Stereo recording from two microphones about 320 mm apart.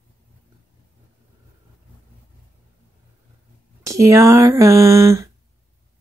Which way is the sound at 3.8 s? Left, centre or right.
Centre.